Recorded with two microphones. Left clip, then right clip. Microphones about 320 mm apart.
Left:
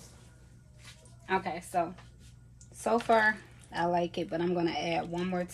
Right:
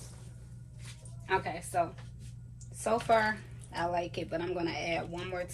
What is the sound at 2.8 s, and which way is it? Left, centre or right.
Speech, left.